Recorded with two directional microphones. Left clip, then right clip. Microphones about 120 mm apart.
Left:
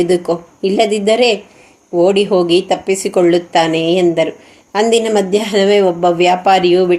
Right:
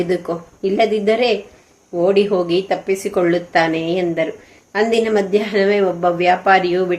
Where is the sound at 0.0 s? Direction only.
45° left (ahead or behind).